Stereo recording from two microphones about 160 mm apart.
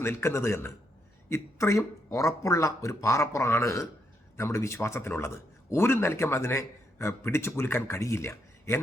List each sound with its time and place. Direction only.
0.0 s a man's voice: 15° left (ahead or behind)